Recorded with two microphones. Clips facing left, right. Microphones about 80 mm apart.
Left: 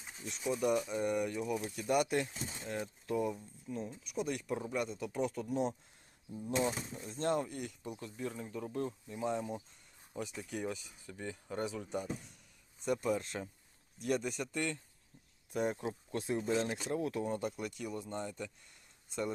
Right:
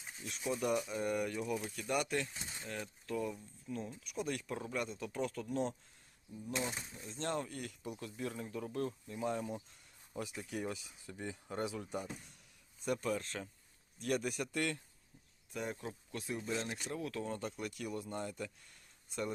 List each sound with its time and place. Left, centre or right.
0.3 s speech: centre
3.8 s speech: centre
6.6 s speech: left
7.1 s speech: centre
15.5 s speech: left
17.6 s speech: centre